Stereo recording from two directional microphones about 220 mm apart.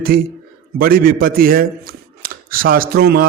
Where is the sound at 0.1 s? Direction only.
40° right (ahead or behind).